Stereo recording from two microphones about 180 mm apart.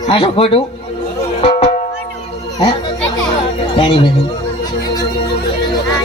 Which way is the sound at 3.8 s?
25° left (ahead or behind).